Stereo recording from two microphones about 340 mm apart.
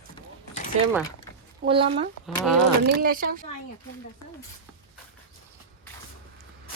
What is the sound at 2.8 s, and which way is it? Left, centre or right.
Speech, right.